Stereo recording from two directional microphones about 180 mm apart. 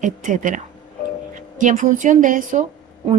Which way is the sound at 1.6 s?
45° right (ahead or behind).